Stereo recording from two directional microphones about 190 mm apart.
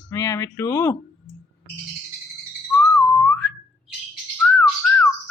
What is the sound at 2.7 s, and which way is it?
Whistling, 5° left (ahead or behind).